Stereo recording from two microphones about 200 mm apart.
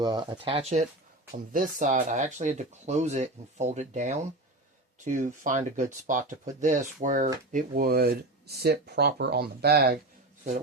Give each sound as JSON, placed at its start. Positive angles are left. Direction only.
{"t": 0.0, "sound": "speech", "side_deg": -20}
{"t": 1.5, "sound": "speech", "side_deg": -40}